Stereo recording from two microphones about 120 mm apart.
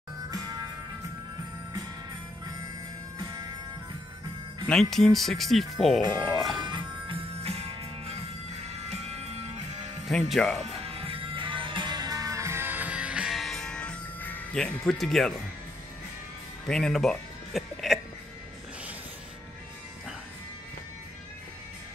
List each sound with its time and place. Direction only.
4.6 s speech: 5° left (ahead or behind)
6.6 s music: 40° right (ahead or behind)
7.4 s music: 55° right (ahead or behind)
10.3 s speech: 5° left (ahead or behind)
10.9 s music: 55° right (ahead or behind); by 15.3 s 5° left (ahead or behind)
16.6 s music: 5° left (ahead or behind)